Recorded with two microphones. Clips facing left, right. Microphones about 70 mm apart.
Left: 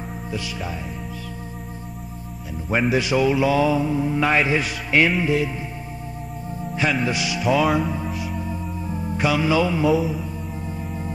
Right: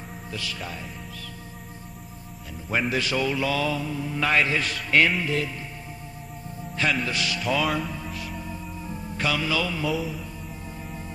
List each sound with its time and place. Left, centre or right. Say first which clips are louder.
0.3 s mantra: left 4 dB; centre
2.7 s mantra: left 5 dB; centre
6.7 s mantra: left 4 dB; centre
8.1 s music: left 6 dB; centre
9.9 s mantra: left 7 dB; centre
10.8 s organ: left 6 dB; centre